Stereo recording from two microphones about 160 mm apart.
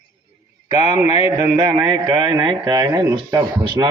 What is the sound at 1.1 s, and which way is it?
A man's voice, 25° right (ahead or behind).